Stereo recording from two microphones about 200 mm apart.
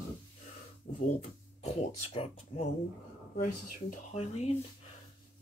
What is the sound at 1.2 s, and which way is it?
Speech, 35° left (ahead or behind).